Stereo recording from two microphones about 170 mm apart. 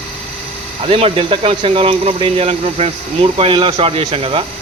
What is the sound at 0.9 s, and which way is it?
Speech, 35° right (ahead or behind).